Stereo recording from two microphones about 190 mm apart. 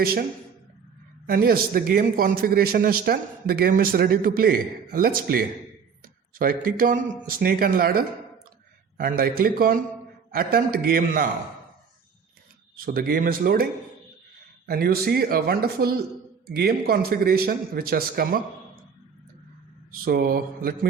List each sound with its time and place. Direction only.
0.0 s a man's voice: 55° right (ahead or behind)
1.3 s a man's voice: 50° right (ahead or behind)
12.7 s a man's voice: 50° right (ahead or behind)
14.7 s a man's voice: 55° right (ahead or behind)
19.9 s a man's voice: 50° right (ahead or behind)